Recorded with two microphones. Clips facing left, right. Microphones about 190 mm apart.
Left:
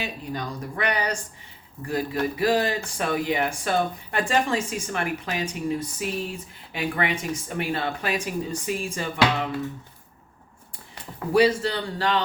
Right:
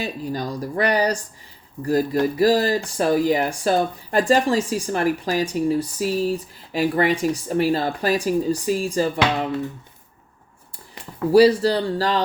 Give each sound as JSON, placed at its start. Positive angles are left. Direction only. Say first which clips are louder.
{"t": 0.0, "sound": "speech", "louder": "right 5 dB", "side_deg": -35}
{"t": 11.3, "sound": "speech", "louder": "right 6 dB", "side_deg": -35}